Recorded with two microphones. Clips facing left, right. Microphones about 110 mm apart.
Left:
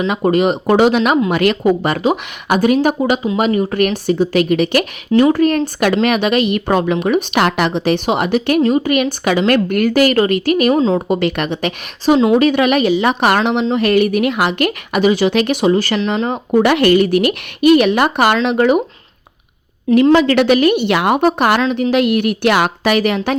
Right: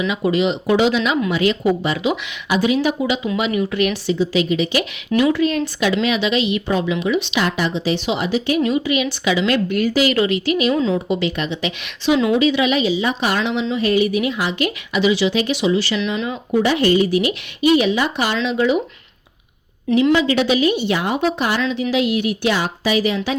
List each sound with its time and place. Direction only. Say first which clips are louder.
0.1 s a woman's voice: left 6 dB; 50° left (ahead or behind)
5.1 s a woman's voice: left 5 dB; 40° left (ahead or behind); by 8.6 s 60° left (ahead or behind)
8.6 s a woman's voice: left 5 dB; 45° left (ahead or behind)
12.4 s a woman's voice: left 4 dB; 55° left (ahead or behind)
20.1 s a woman's voice: left 5 dB; 60° left (ahead or behind)